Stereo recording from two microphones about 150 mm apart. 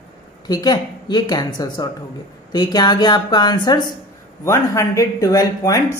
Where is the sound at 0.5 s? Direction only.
25° left (ahead or behind).